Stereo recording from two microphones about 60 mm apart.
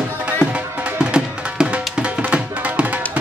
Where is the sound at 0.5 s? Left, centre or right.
Centre.